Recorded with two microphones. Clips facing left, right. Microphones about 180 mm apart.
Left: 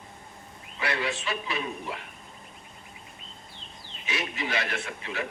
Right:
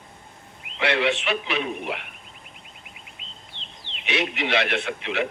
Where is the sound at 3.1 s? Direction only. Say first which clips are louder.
Right 1 dB; 85° right.